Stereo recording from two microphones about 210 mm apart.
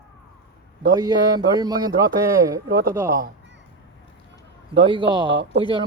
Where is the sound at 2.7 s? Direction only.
50° right (ahead or behind).